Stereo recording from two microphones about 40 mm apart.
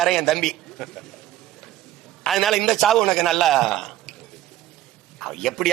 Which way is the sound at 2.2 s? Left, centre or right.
Centre.